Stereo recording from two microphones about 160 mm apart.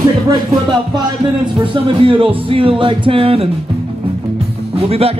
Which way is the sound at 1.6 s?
35° right (ahead or behind).